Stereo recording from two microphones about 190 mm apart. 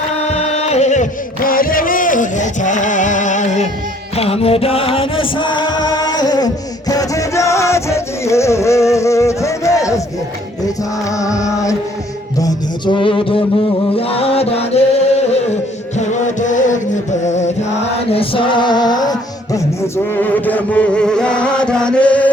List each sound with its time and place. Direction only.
0.2 s music: 35° left (ahead or behind)
1.5 s middle eastern music: 50° left (ahead or behind)
4.2 s music: 30° left (ahead or behind); by 10.0 s 15° left (ahead or behind)
11.2 s music: 15° left (ahead or behind)
12.4 s a sound: 20° left (ahead or behind)
13.9 s music: 30° left (ahead or behind)
20.2 s chant: 10° left (ahead or behind)